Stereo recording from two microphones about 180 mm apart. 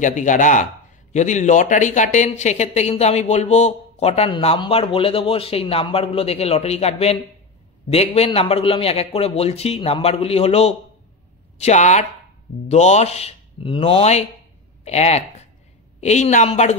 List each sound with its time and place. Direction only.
0.0 s speech: 45° left (ahead or behind)